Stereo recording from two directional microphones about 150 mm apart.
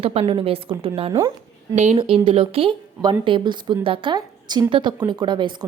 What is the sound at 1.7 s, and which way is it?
Speech, 50° right (ahead or behind).